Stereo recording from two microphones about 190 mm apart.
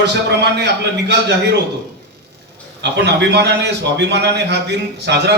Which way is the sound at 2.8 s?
65° right (ahead or behind).